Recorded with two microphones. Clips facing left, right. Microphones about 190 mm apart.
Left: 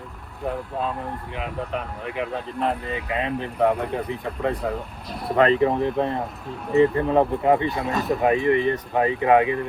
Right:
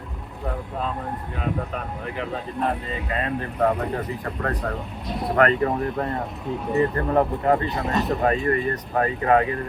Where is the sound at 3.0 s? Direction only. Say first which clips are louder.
Even; 10° left (ahead or behind).